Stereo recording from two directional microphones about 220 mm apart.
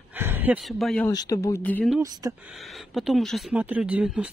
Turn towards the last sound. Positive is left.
turn(degrees=-5)  # may be behind; listen again after turning